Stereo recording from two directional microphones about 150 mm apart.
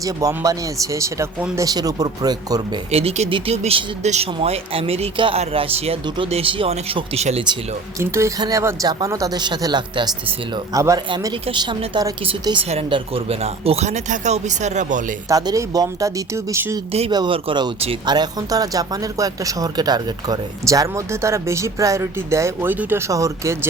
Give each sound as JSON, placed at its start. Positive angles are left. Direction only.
{"t": 0.0, "sound": "speech", "side_deg": -20}
{"t": 2.9, "sound": "speech", "side_deg": -45}
{"t": 7.9, "sound": "speech", "side_deg": -20}
{"t": 15.3, "sound": "speech", "side_deg": -25}
{"t": 17.1, "sound": "speech", "side_deg": -30}